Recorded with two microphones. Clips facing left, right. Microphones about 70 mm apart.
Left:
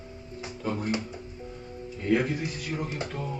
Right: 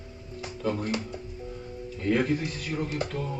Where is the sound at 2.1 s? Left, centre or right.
Centre.